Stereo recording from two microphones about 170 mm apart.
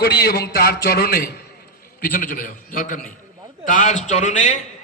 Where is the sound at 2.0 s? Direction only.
55° left (ahead or behind).